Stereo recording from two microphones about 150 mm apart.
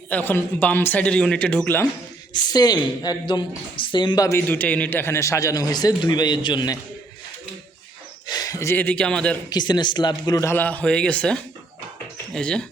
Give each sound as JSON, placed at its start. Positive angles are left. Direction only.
{"t": 0.1, "sound": "speech", "side_deg": 10}
{"t": 2.3, "sound": "a woman's voice", "side_deg": 30}
{"t": 8.3, "sound": "speech", "side_deg": 25}
{"t": 9.5, "sound": "a woman's voice", "side_deg": 30}